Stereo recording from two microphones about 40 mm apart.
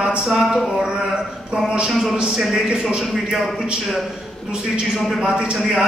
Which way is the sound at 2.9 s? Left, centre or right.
Centre.